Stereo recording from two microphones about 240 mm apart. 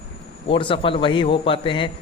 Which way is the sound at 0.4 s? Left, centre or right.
Left.